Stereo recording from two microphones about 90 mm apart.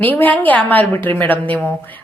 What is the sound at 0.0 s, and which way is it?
A woman's voice, 20° left (ahead or behind).